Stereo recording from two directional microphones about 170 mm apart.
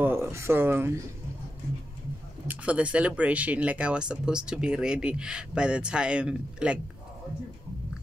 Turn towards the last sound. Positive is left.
turn(degrees=-5)  # may be behind; listen again after turning